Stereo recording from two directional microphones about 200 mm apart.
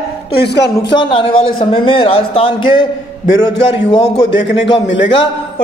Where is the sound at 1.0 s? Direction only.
25° left (ahead or behind).